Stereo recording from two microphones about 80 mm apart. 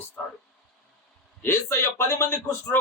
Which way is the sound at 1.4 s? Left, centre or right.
Left.